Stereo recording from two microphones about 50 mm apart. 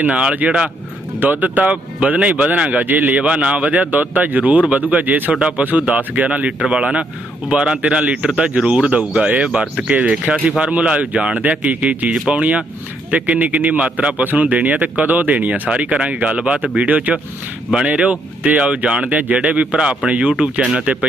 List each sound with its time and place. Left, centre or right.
0.0 s speech: right
1.2 s speech: right
3.2 s speech: right
5.3 s speech: right
11.4 s speech: right